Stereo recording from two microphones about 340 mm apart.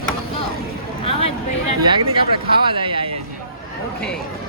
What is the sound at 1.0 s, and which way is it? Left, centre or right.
Speech, centre.